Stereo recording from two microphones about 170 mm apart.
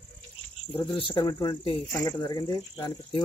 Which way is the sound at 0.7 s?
30° left (ahead or behind).